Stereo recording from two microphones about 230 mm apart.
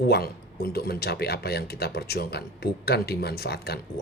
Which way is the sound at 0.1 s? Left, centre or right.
Left.